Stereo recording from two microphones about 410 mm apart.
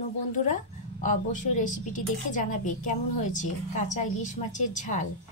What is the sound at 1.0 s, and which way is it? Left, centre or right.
Speech, centre.